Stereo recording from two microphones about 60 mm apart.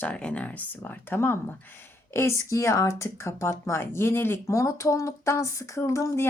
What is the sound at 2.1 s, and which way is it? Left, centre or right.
Speech, left.